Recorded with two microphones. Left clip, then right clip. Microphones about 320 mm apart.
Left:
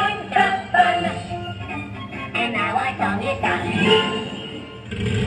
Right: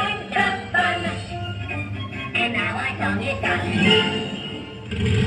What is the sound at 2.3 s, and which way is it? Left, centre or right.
Music, centre.